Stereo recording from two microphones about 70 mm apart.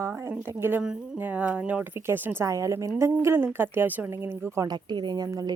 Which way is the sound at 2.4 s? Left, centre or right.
Right.